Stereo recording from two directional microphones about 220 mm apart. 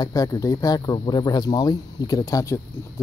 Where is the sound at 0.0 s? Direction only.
15° left (ahead or behind).